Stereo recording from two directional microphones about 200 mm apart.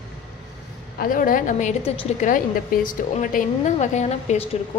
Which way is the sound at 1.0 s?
45° left (ahead or behind).